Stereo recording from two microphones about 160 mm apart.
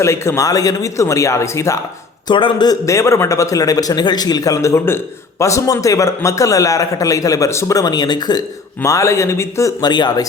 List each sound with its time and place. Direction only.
0.0 s a man's voice: 15° left (ahead or behind)
2.2 s a man's voice: 30° left (ahead or behind)